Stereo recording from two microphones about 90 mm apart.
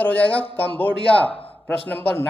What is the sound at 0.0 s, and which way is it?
Speech, 15° left (ahead or behind).